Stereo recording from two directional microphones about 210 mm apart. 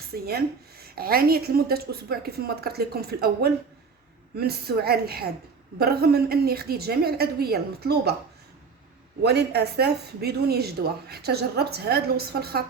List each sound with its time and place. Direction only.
0.1 s speech: 45° right (ahead or behind)
9.2 s speech: 50° right (ahead or behind)